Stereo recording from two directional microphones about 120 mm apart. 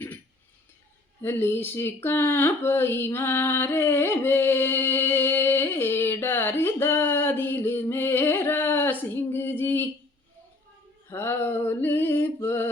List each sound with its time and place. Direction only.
1.2 s speech: 20° left (ahead or behind)
11.1 s music: 20° left (ahead or behind)